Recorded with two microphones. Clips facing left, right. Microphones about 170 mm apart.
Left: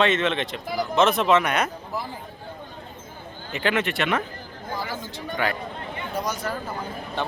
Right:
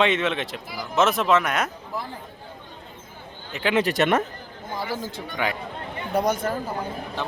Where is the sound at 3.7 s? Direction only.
40° right (ahead or behind).